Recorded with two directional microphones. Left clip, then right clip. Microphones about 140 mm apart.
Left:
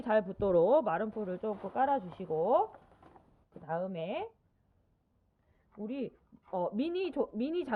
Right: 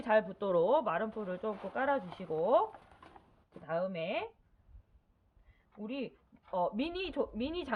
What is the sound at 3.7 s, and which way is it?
Speech, 30° left (ahead or behind).